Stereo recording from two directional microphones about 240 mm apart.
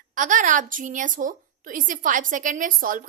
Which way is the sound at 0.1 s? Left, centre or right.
Right.